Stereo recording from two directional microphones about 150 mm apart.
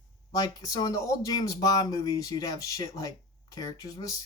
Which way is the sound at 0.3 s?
25° left (ahead or behind).